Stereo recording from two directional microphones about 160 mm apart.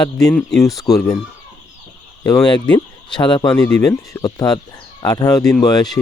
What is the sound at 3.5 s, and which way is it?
Speech, 5° left (ahead or behind).